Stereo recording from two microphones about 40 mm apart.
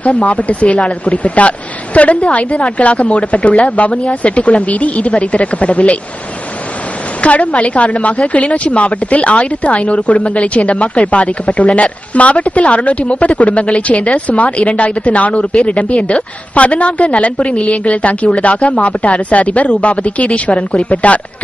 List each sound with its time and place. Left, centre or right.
0.0 s a woman's voice: left
7.2 s a woman's voice: left